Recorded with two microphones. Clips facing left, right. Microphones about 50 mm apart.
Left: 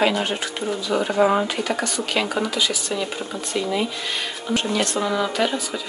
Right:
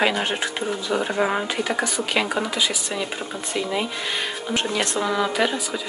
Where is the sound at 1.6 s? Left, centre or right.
Centre.